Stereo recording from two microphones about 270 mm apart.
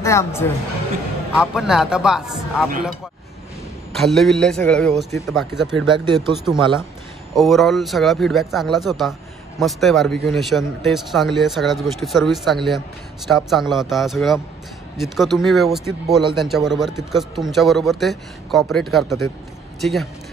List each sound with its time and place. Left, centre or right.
0.0 s speech: centre
1.3 s speech: centre
3.9 s speech: centre
5.9 s speech: centre
6.3 s speech: centre